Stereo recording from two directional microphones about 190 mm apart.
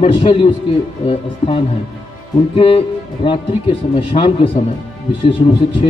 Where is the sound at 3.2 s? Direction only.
30° left (ahead or behind).